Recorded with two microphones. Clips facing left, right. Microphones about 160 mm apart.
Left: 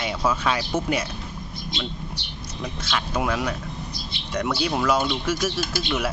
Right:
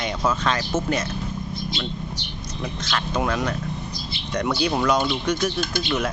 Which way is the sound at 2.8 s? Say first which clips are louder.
Right 1 dB; 10° left (ahead or behind).